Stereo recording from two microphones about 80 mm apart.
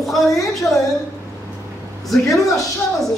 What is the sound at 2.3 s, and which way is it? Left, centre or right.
Speech, left.